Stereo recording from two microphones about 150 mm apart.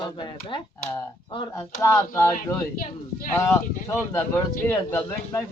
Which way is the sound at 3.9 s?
15° left (ahead or behind).